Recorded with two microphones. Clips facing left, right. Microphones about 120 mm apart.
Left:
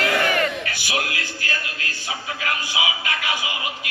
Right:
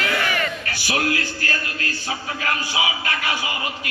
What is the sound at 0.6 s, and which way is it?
Music, 40° right (ahead or behind).